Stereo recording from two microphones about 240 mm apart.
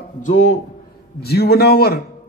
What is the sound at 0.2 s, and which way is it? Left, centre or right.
A man's voice, left.